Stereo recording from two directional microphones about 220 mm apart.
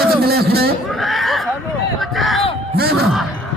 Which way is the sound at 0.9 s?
Centre (ahead or behind).